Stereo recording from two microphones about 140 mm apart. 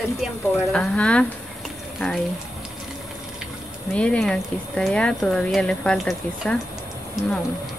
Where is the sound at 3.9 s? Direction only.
10° left (ahead or behind).